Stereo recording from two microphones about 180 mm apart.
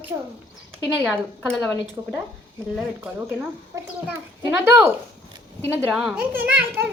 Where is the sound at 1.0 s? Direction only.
Centre (ahead or behind).